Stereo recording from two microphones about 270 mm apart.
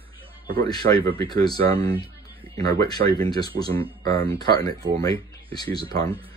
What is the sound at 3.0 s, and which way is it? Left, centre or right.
Speech, right.